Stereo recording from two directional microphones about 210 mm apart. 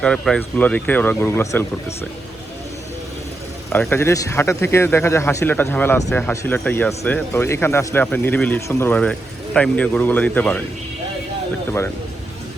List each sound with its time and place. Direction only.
0.0 s speech: 5° left (ahead or behind)
3.7 s speech: 10° left (ahead or behind)